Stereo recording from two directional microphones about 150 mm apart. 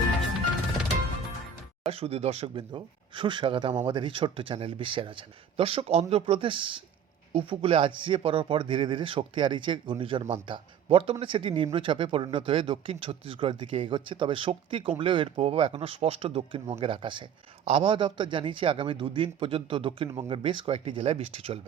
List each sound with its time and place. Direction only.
1.8 s speech: 40° right (ahead or behind)